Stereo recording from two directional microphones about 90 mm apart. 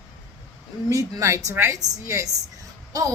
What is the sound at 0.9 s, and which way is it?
Speech, 40° right (ahead or behind).